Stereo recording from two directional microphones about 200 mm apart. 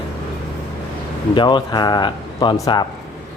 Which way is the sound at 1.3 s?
20° left (ahead or behind).